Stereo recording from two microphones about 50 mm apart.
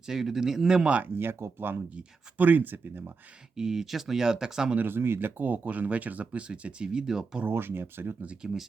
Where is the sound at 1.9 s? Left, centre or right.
Right.